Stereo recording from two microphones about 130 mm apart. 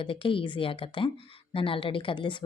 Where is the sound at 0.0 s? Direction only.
40° left (ahead or behind).